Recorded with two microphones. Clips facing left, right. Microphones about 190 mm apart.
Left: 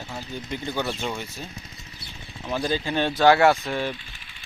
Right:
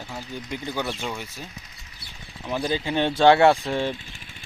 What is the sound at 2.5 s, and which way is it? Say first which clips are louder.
Speech: even; 15° right (ahead or behind).